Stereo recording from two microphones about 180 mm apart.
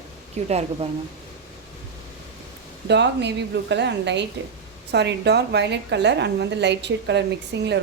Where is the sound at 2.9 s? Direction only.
70° right (ahead or behind).